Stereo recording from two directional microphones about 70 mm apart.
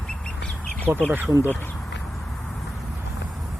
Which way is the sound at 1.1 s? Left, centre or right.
Right.